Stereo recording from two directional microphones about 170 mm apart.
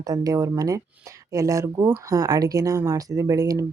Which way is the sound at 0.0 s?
20° right (ahead or behind).